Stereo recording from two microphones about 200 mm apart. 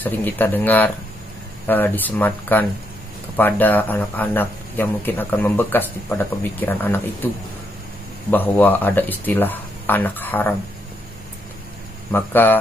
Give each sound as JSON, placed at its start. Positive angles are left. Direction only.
{"t": 0.0, "sound": "speech", "side_deg": 10}
{"t": 8.3, "sound": "speech", "side_deg": 10}
{"t": 12.1, "sound": "speech", "side_deg": 10}